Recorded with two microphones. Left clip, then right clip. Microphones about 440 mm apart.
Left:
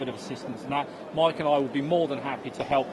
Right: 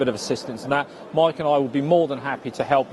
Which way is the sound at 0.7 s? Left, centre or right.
Right.